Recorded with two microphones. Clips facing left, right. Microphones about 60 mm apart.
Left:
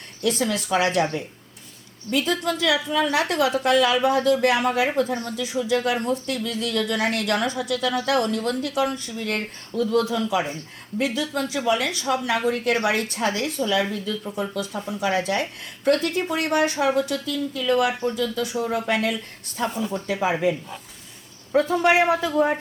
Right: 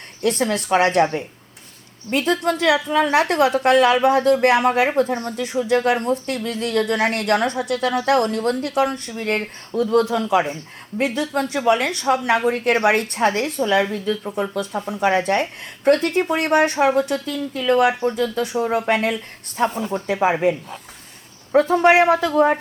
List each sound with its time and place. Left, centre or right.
0.2 s a woman's voice: right
2.0 s a woman's voice: right